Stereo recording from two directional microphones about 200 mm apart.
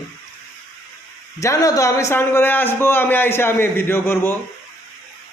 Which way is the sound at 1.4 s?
15° left (ahead or behind).